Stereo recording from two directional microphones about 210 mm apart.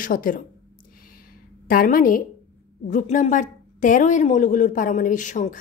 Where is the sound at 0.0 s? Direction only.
40° left (ahead or behind).